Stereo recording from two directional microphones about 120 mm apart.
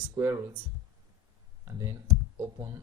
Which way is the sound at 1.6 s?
20° right (ahead or behind).